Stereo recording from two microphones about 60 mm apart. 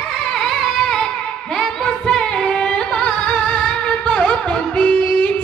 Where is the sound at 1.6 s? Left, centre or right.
Centre.